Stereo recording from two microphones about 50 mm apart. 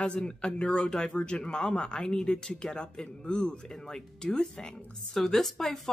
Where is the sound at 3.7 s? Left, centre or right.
Centre.